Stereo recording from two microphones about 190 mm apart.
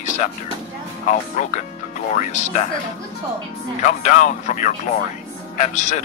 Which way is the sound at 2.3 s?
40° left (ahead or behind).